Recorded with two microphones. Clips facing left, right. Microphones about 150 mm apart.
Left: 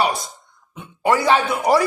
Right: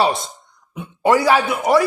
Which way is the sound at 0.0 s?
25° right (ahead or behind).